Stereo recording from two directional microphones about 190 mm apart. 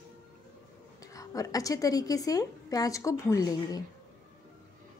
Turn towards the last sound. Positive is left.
turn(degrees=20)  # may be behind; listen again after turning